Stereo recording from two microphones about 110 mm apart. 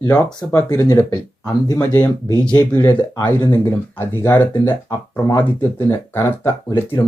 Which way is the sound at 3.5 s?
20° left (ahead or behind).